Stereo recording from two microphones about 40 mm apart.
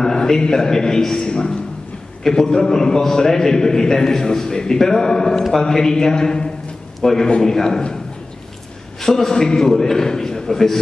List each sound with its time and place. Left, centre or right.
0.0 s a man's voice: centre
9.0 s a man's voice: centre